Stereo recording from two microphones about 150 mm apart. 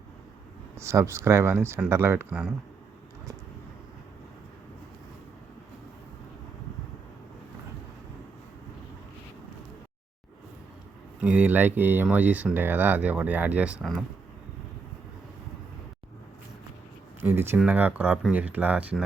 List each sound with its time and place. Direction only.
0.8 s speech: 20° right (ahead or behind)
11.2 s speech: 10° right (ahead or behind)
17.2 s speech: 15° right (ahead or behind)